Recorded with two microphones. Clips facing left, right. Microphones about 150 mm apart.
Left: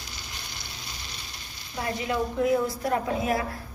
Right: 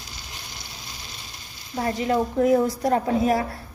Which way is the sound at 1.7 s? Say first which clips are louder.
Right 6 dB; 40° right (ahead or behind).